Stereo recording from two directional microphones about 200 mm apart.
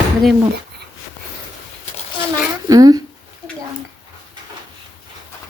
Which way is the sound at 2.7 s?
20° right (ahead or behind).